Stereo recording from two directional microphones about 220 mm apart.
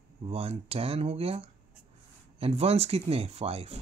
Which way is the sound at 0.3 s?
25° right (ahead or behind).